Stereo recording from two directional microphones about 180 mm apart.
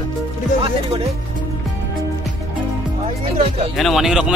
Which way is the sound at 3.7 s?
Centre (ahead or behind).